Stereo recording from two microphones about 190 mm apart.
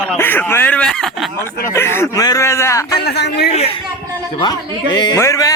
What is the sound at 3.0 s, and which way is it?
Speech, 60° left (ahead or behind).